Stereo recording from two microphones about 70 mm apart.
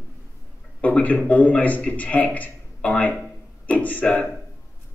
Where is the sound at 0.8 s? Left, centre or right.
Left.